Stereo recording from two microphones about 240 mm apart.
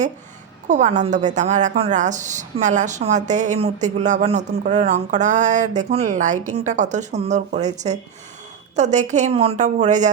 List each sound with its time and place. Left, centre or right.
0.7 s a woman's voice: right